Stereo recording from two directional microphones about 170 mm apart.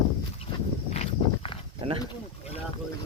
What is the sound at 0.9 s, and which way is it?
Walk, 35° left (ahead or behind).